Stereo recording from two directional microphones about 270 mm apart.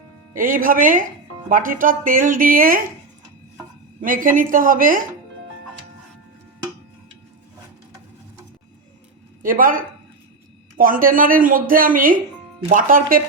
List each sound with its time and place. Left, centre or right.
0.3 s speech: right
4.0 s speech: right
9.4 s speech: right